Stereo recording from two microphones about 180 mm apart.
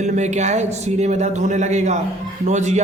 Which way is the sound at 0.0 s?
40° right (ahead or behind).